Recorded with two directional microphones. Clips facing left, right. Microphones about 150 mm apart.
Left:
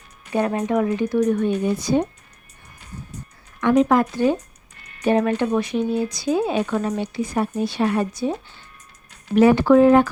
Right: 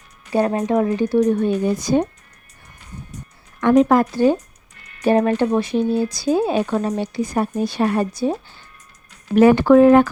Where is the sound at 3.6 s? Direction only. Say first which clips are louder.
Right 3 dB; 40° right (ahead or behind).